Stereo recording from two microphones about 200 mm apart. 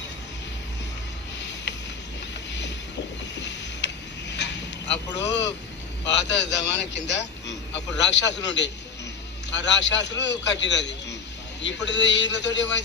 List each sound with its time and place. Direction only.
1.4 s a sound: 60° left (ahead or behind)
3.3 s vehicle: 60° left (ahead or behind)
5.1 s a man's voice: 60° left (ahead or behind)